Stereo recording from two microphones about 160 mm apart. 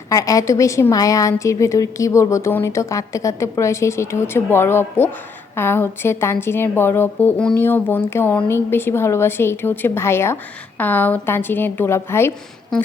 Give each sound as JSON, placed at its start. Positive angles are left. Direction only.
{"t": 0.1, "sound": "a woman's voice", "side_deg": 20}